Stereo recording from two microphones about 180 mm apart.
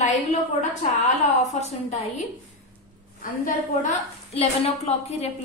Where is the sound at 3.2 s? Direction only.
50° left (ahead or behind).